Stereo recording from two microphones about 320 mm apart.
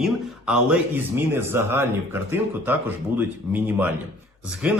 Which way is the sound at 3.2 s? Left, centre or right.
Centre.